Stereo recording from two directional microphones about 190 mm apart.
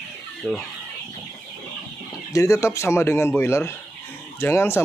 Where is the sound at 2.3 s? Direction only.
15° left (ahead or behind).